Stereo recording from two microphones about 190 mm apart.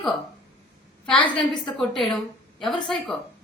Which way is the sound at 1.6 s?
Centre (ahead or behind).